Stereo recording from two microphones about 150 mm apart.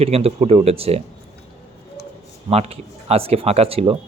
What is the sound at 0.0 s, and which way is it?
Speech, 40° right (ahead or behind).